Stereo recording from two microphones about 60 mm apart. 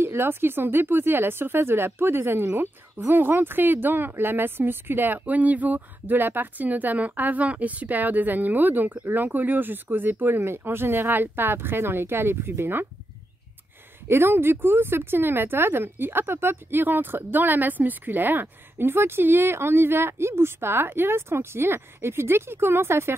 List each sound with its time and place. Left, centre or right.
0.0 s speech: right
14.0 s speech: right